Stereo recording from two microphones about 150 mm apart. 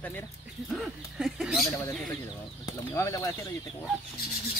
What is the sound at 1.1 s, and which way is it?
Speech, 5° right (ahead or behind).